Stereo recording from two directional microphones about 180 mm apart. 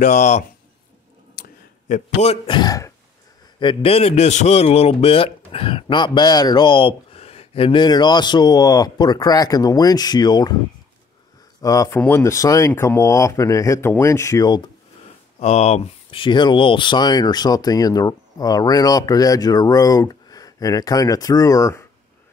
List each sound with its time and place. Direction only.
0.0 s a man's voice: 40° left (ahead or behind)
1.4 s a sound: 45° left (ahead or behind)
2.4 s a man's voice: 25° left (ahead or behind)
11.6 s speech: 20° left (ahead or behind)
15.3 s a man's voice: 35° left (ahead or behind); by 21.8 s 20° left (ahead or behind)